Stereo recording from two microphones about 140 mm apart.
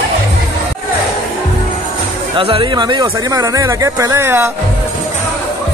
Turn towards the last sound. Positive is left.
turn(degrees=-20)  # may be behind; listen again after turning